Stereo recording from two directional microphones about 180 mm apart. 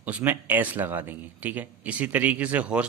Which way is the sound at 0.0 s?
10° right (ahead or behind).